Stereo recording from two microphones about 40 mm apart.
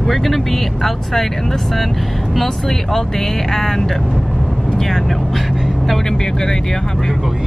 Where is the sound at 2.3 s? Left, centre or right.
Centre.